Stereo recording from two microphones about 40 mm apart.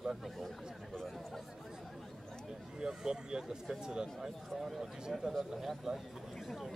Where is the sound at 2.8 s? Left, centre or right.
Centre.